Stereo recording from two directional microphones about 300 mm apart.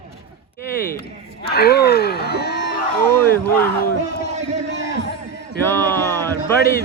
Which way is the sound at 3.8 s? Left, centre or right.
Left.